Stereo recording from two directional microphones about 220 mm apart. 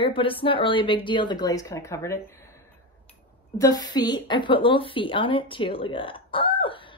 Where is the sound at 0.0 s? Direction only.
25° left (ahead or behind).